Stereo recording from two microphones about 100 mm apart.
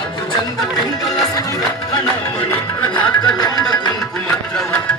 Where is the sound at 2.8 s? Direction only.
45° left (ahead or behind).